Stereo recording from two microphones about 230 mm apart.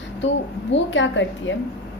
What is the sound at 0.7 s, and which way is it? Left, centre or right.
Speech, left.